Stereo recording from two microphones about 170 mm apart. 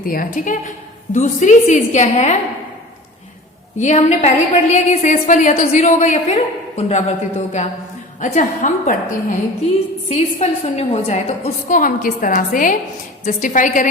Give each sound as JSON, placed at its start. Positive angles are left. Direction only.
{"t": 0.0, "sound": "a woman's voice", "side_deg": 55}
{"t": 3.8, "sound": "a woman's voice", "side_deg": 40}
{"t": 10.1, "sound": "a woman's voice", "side_deg": 35}
{"t": 11.7, "sound": "a woman's voice", "side_deg": 55}